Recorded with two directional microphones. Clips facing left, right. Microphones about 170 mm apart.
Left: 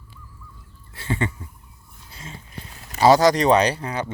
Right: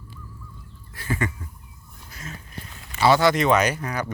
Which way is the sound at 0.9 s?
25° left (ahead or behind).